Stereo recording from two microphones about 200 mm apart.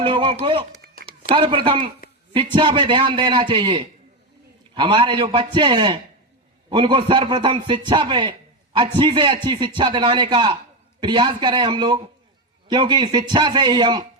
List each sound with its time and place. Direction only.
0.0 s a man's voice: 25° right (ahead or behind)